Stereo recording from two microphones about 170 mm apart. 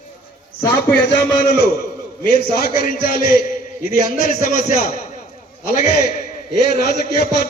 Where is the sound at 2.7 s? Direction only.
55° left (ahead or behind).